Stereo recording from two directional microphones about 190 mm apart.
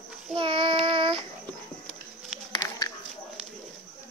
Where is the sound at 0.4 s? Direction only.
30° right (ahead or behind).